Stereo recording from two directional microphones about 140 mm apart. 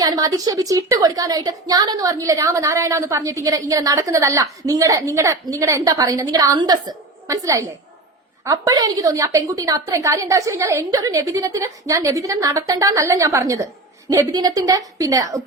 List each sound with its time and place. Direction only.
0.0 s a woman's voice: 25° right (ahead or behind)